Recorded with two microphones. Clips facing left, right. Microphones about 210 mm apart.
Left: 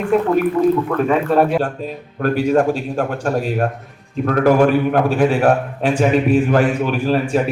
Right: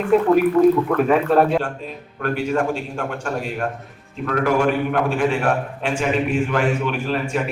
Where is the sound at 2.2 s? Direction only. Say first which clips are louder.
Left 6 dB; 40° left (ahead or behind).